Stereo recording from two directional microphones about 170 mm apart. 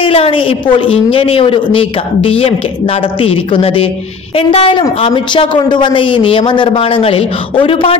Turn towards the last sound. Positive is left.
turn(degrees=35)  # may be behind; listen again after turning